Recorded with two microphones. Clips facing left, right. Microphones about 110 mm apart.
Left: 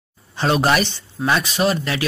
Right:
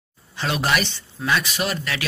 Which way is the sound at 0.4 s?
35° left (ahead or behind).